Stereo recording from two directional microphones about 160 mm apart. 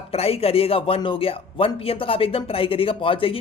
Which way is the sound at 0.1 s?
40° left (ahead or behind).